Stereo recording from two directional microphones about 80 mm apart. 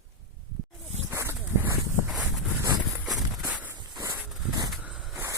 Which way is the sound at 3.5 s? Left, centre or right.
Centre.